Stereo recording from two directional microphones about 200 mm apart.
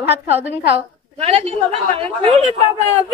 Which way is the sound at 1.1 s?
30° right (ahead or behind).